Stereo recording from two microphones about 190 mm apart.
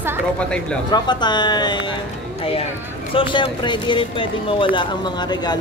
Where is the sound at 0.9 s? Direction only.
25° left (ahead or behind).